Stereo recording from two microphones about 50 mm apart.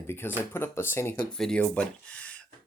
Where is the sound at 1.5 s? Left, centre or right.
Left.